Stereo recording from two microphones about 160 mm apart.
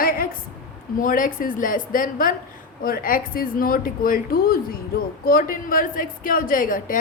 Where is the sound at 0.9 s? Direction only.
60° left (ahead or behind).